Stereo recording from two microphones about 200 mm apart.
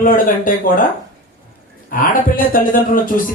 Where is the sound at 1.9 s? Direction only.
45° left (ahead or behind).